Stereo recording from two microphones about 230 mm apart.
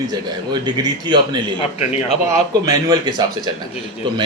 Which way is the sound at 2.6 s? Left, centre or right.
Centre.